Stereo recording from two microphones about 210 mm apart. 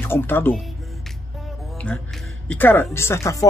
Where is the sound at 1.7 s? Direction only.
5° left (ahead or behind).